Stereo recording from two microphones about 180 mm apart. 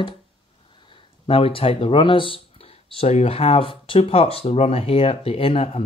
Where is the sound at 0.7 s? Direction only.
30° left (ahead or behind).